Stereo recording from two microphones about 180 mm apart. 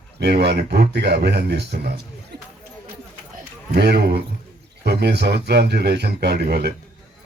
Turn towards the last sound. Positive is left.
turn(degrees=-60)  # may be behind; listen again after turning